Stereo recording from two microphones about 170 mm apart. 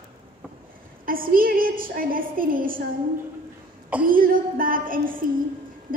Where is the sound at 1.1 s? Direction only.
55° right (ahead or behind).